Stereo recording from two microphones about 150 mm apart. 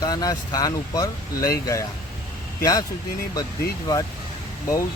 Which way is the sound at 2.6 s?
25° left (ahead or behind).